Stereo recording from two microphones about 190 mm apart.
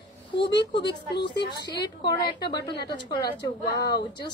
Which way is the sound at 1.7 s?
20° left (ahead or behind).